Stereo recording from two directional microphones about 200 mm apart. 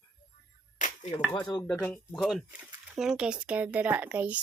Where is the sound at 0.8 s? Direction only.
35° left (ahead or behind).